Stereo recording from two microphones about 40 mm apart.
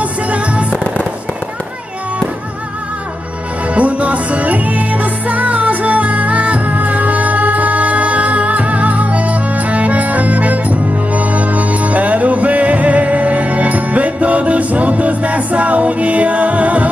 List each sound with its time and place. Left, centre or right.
3.7 s music: right